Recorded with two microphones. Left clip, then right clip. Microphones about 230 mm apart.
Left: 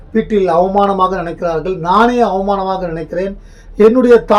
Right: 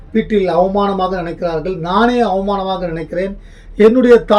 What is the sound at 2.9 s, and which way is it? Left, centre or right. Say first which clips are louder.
Speech: left 1 dB; centre.